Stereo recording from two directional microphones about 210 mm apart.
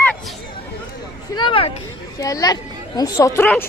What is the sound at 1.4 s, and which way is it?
Speech, 25° left (ahead or behind).